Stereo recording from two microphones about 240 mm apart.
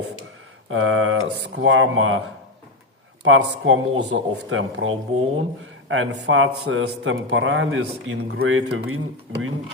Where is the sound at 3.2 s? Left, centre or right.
Right.